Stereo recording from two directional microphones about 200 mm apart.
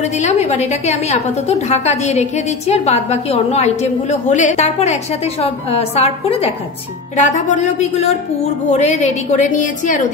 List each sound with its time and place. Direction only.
0.0 s a woman's voice: 35° left (ahead or behind)